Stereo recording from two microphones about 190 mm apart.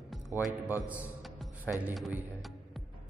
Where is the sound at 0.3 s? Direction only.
10° right (ahead or behind).